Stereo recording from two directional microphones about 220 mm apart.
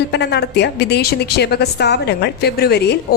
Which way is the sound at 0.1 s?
50° left (ahead or behind).